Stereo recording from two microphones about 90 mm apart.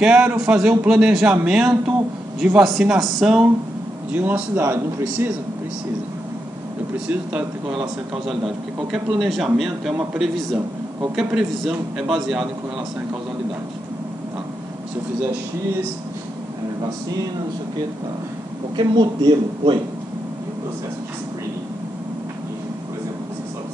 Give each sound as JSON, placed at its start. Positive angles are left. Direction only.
{"t": 0.0, "sound": "a man's voice", "side_deg": -10}
{"t": 4.1, "sound": "a man's voice", "side_deg": -20}
{"t": 9.2, "sound": "a man's voice", "side_deg": 0}
{"t": 18.8, "sound": "a woman's voice", "side_deg": -60}